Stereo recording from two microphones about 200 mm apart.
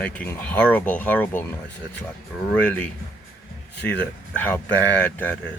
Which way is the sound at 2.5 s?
5° left (ahead or behind).